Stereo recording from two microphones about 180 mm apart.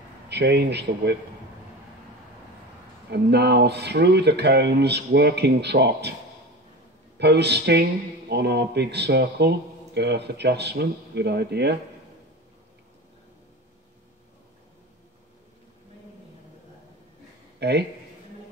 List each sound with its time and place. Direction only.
0.3 s a man's voice: 65° right (ahead or behind)
3.1 s a man's voice: 70° right (ahead or behind)
7.2 s a man's voice: 70° right (ahead or behind)
17.6 s speech: 65° right (ahead or behind)